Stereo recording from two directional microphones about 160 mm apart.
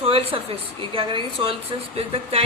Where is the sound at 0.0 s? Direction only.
35° right (ahead or behind).